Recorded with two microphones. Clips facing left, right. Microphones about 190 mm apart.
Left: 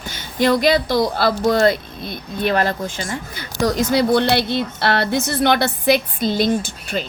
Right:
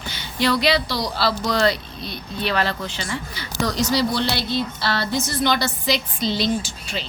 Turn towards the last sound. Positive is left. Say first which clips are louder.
# left 6 dB
turn(degrees=50)  # may be behind; listen again after turning